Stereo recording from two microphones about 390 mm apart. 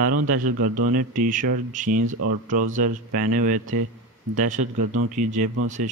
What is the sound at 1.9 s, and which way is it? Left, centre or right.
Speech, right.